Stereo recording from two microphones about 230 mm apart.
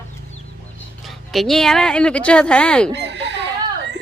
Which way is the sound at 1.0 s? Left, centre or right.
Centre.